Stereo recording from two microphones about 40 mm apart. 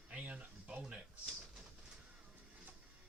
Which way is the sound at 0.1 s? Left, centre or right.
Right.